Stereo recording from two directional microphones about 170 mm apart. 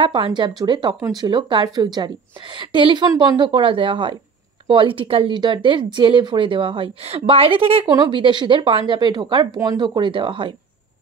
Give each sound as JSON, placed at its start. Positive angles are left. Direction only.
{"t": 0.0, "sound": "speech", "side_deg": -30}